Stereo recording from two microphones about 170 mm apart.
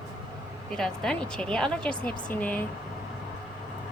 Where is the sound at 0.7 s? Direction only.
5° left (ahead or behind).